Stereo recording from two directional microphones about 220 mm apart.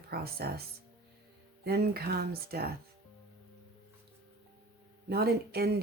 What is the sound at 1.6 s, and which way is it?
Speech, 45° right (ahead or behind).